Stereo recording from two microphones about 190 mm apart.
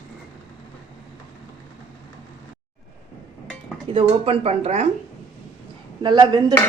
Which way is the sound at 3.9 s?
30° right (ahead or behind).